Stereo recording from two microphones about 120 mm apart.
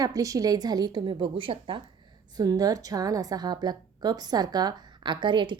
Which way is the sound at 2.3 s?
30° right (ahead or behind).